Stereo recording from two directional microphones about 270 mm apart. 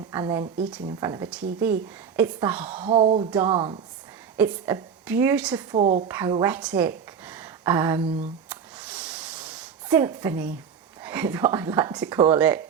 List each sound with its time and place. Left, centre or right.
0.1 s speech: centre
2.8 s speech: right; by 5.6 s centre
5.7 s speech: right
6.1 s a woman's voice: centre
8.4 s a sound: centre
11.0 s speech: centre